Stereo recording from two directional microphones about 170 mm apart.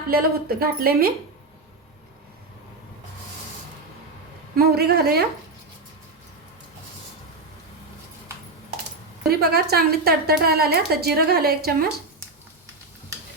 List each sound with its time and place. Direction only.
0.1 s a woman's voice: 60° right (ahead or behind)
4.5 s a woman's voice: 65° right (ahead or behind)
9.2 s a woman's voice: 70° right (ahead or behind)